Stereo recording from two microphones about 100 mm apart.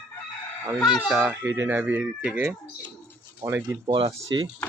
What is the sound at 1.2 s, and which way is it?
Speech, 25° right (ahead or behind).